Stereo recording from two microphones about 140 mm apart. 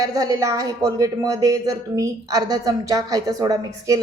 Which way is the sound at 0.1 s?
25° right (ahead or behind).